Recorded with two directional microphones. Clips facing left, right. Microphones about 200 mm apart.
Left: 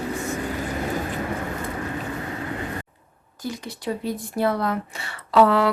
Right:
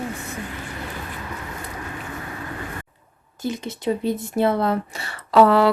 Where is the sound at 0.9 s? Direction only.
50° left (ahead or behind).